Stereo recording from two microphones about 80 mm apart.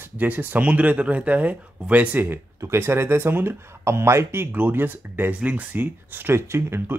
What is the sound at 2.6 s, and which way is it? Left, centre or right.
Speech, right.